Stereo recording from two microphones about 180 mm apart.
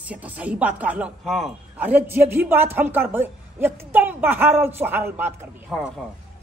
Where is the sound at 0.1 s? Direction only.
10° right (ahead or behind).